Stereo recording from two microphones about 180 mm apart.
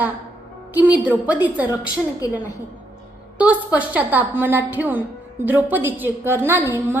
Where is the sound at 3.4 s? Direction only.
10° right (ahead or behind).